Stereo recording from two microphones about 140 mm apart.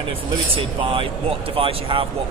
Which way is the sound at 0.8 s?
40° right (ahead or behind).